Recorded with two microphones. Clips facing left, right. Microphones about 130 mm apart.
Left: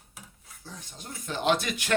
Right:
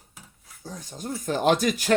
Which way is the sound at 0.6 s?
40° right (ahead or behind).